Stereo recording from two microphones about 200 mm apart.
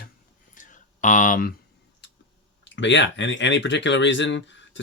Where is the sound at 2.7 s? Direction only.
65° left (ahead or behind).